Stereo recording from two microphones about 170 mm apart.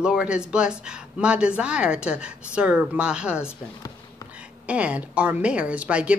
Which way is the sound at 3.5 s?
20° left (ahead or behind).